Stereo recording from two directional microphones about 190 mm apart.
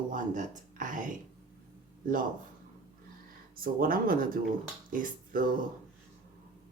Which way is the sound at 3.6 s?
50° right (ahead or behind).